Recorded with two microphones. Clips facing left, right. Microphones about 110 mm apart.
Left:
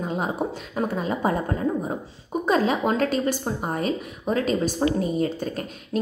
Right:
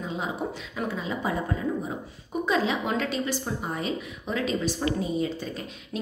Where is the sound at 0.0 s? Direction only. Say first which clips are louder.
Left 5 dB; 50° left (ahead or behind).